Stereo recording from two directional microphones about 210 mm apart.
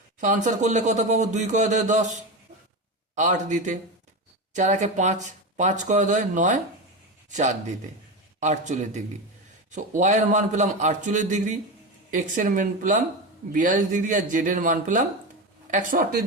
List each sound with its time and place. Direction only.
0.2 s a man's voice: 35° right (ahead or behind)